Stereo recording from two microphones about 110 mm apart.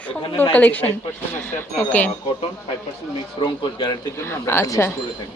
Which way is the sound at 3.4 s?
40° left (ahead or behind).